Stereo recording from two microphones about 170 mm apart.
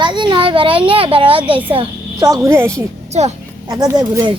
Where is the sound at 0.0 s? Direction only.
25° right (ahead or behind).